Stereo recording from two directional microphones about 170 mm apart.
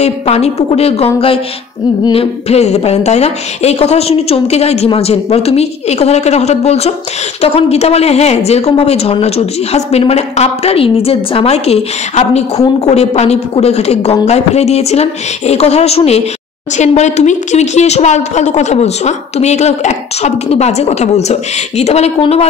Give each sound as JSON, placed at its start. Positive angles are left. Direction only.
{"t": 0.0, "sound": "a woman's voice", "side_deg": 40}